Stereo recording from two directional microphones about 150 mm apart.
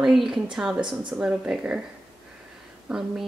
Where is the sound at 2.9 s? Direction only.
5° right (ahead or behind).